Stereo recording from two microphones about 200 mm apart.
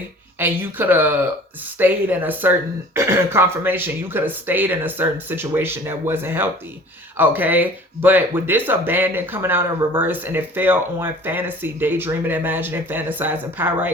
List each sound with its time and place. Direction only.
0.3 s speech: 10° right (ahead or behind)